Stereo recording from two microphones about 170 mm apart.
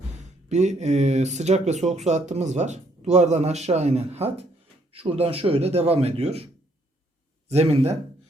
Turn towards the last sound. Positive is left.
turn(degrees=-35)  # may be behind; listen again after turning